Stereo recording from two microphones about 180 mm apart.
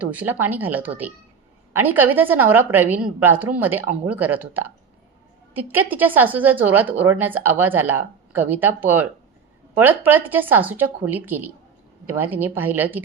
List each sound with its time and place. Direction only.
0.0 s speech: 10° right (ahead or behind)